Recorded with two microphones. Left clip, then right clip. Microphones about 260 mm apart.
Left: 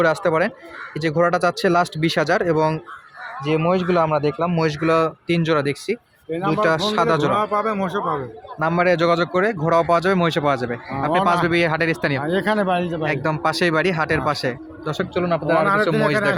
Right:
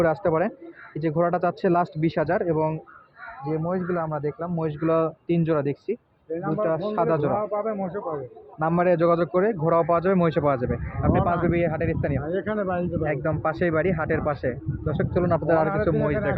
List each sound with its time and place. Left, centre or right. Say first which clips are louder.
0.0 s speech: left 4 dB; centre
3.4 s speech: left 8 dB; left
4.0 s a man's voice: left 9 dB; left
4.9 s speech: left 2 dB; centre
7.3 s speech: left 6 dB; left
8.5 s speech: left 3 dB; centre
12.2 s speech: left 7 dB; left
13.1 s speech: left 5 dB; centre